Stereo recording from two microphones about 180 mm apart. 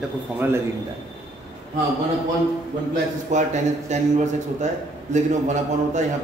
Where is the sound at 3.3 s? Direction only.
40° right (ahead or behind).